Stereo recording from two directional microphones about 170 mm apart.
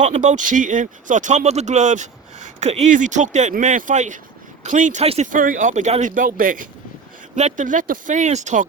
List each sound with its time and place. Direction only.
0.0 s speech: 45° right (ahead or behind)